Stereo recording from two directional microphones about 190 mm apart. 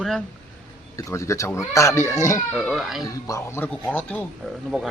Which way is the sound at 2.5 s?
Centre (ahead or behind).